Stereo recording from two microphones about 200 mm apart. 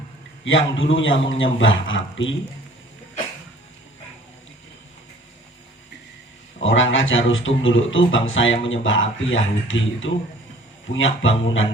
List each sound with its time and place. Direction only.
0.4 s a man's voice: 75° left (ahead or behind)
6.6 s a man's voice: 75° left (ahead or behind)